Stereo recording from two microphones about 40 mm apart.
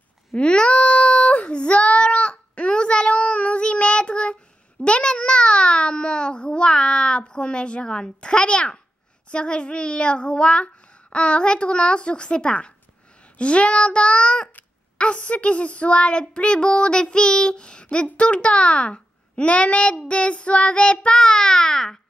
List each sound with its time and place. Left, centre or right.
0.4 s child singing: left
4.8 s a sound: left
9.3 s speech: left